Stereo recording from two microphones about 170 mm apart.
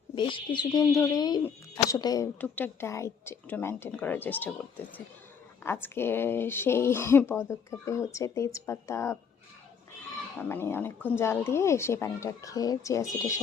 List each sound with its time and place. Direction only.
0.2 s speech: 30° left (ahead or behind); by 4.5 s 10° left (ahead or behind)
5.6 s speech: 15° left (ahead or behind)
10.5 s speech: 15° left (ahead or behind)